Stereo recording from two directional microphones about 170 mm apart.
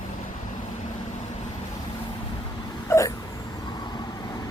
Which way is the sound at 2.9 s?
15° left (ahead or behind).